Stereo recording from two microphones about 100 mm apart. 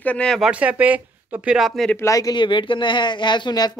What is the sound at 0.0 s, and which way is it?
Speech, 10° left (ahead or behind).